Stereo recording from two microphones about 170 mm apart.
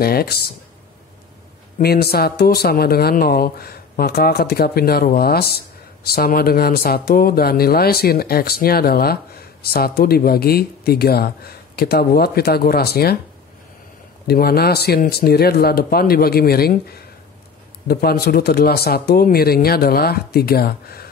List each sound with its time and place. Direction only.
0.0 s speech: 65° left (ahead or behind)
1.8 s speech: 65° left (ahead or behind)
14.2 s speech: 65° left (ahead or behind)